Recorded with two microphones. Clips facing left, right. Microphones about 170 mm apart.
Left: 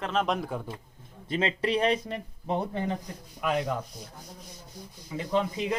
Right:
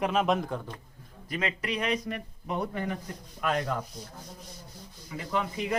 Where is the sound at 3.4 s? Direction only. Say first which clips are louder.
Left 1 dB; 15° left (ahead or behind).